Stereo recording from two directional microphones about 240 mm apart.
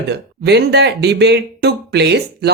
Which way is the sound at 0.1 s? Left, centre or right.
Right.